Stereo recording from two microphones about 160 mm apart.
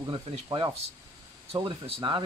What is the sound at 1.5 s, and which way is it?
Speech, 35° right (ahead or behind).